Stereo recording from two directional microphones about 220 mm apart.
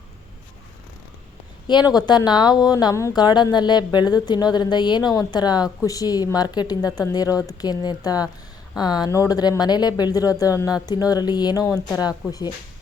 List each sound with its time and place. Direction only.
1.9 s a woman's voice: 20° left (ahead or behind)